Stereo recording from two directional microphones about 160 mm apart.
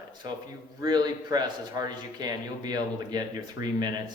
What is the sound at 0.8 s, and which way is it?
Speech, 25° right (ahead or behind).